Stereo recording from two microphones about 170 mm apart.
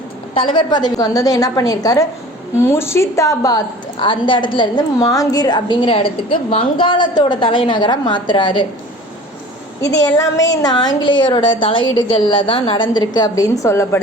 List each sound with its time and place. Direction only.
0.3 s a woman's voice: 30° left (ahead or behind)
10.6 s a woman's voice: 25° left (ahead or behind)